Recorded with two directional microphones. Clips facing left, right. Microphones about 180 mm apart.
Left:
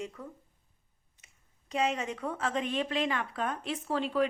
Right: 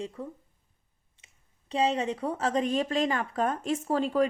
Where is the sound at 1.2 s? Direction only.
25° right (ahead or behind).